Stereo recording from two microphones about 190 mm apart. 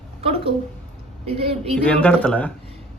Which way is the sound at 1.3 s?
30° right (ahead or behind).